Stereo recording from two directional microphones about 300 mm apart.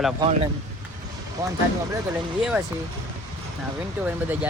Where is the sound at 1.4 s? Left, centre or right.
Centre.